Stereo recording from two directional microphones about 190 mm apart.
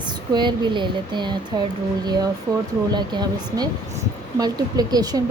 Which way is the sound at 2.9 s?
20° right (ahead or behind).